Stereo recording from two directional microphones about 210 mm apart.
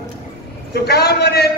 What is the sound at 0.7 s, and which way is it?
Speech, 50° left (ahead or behind).